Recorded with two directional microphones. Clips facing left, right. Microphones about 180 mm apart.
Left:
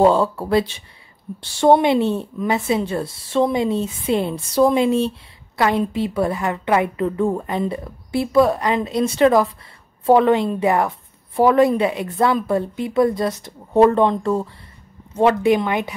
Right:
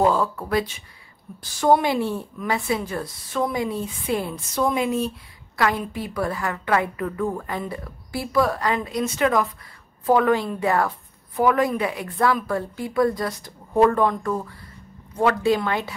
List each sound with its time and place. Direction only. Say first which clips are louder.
0.0 s a woman's voice: left 5 dB; 30° left (ahead or behind)